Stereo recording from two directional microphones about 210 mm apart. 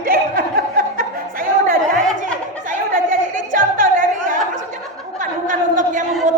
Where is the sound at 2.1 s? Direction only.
40° right (ahead or behind).